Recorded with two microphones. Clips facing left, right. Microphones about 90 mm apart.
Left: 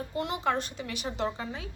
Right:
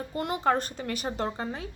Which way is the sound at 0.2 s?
45° right (ahead or behind).